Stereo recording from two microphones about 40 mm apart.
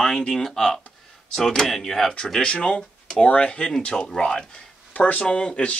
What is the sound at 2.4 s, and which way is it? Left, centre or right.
Speech, left.